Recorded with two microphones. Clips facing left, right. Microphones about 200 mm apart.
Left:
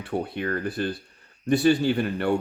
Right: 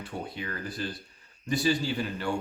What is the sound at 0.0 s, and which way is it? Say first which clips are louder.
Speech: left 8 dB; 60° left (ahead or behind).